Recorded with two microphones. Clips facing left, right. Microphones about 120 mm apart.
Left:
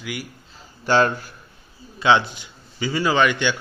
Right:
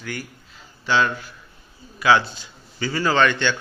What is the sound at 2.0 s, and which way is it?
A man's voice, 20° left (ahead or behind).